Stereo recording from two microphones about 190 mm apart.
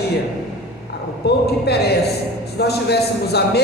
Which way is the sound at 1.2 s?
60° left (ahead or behind).